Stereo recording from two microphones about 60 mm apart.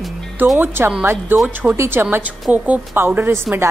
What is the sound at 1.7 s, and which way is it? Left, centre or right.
Speech, right.